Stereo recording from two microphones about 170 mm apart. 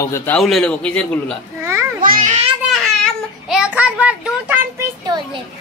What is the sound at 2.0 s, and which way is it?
Speech, 55° right (ahead or behind).